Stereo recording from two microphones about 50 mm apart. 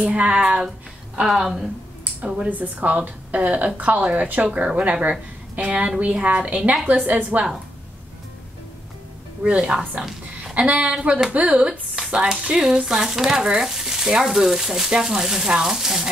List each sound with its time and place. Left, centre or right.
0.0 s a woman's voice: right
1.2 s a woman's voice: centre
2.2 s a woman's voice: right
2.5 s a woman's voice: right
9.4 s a woman's voice: right